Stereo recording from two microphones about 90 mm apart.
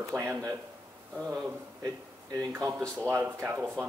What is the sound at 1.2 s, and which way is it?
Speech, 5° left (ahead or behind).